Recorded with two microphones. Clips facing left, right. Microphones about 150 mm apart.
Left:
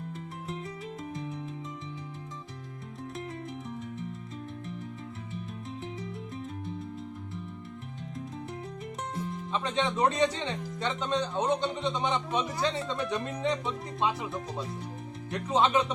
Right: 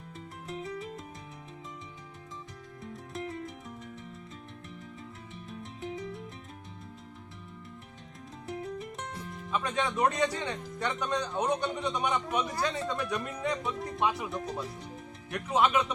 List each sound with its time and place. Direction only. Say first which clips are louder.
0.6 s music: even; centre (ahead or behind)
9.5 s speech: even; 25° left (ahead or behind)